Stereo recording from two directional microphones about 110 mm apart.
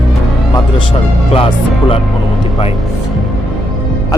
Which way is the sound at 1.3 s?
55° left (ahead or behind).